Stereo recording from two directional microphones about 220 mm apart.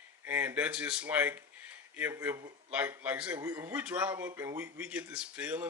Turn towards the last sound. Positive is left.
turn(degrees=-5)  # may be behind; listen again after turning